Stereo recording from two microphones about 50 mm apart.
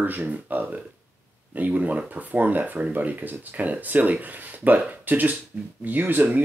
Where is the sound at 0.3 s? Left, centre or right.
Right.